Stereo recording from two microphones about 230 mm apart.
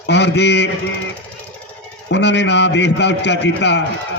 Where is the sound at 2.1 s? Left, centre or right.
Left.